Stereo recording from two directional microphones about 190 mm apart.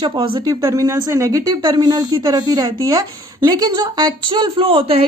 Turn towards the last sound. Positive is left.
turn(degrees=-30)  # may be behind; listen again after turning